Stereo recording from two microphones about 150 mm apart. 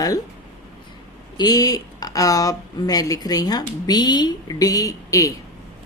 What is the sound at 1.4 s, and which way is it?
Speech, 25° left (ahead or behind).